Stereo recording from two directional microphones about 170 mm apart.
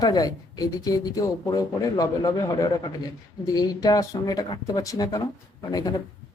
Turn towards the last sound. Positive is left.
turn(degrees=20)  # may be behind; listen again after turning